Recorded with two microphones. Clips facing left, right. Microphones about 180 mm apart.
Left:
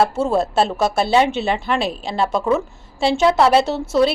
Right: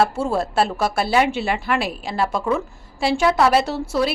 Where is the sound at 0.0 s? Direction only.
20° left (ahead or behind).